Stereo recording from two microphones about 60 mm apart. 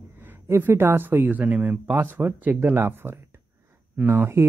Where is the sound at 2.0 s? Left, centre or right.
Right.